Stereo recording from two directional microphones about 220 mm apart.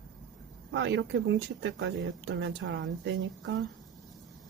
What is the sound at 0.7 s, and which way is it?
Speech, 55° right (ahead or behind).